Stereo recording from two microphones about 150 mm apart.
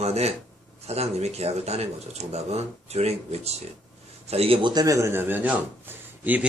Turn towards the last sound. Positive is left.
turn(degrees=-10)  # may be behind; listen again after turning